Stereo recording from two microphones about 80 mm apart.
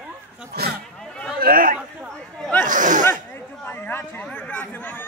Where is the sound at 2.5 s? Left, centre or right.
Left.